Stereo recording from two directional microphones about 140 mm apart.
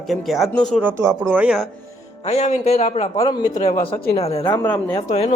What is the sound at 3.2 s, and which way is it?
Speech, 30° left (ahead or behind).